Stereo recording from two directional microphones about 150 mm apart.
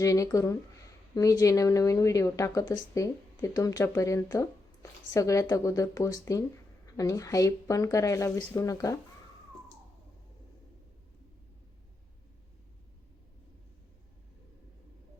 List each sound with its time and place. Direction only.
0.0 s speech: 20° left (ahead or behind)